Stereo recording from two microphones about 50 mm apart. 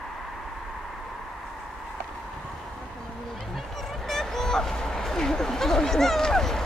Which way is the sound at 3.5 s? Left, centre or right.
Centre.